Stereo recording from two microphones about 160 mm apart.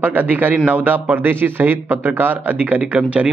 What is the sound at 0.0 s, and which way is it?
A man's voice, 10° right (ahead or behind).